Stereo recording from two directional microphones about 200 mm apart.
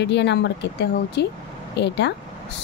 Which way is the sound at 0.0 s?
60° left (ahead or behind).